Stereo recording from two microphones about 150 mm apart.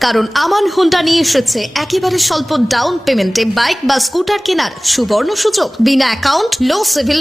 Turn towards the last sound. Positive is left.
turn(degrees=0)  # may be behind; listen again after turning